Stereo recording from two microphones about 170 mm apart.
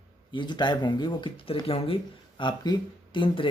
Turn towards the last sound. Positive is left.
turn(degrees=30)  # may be behind; listen again after turning